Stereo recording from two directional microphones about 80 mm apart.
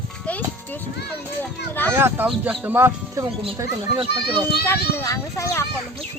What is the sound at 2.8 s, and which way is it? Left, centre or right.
Speech, right.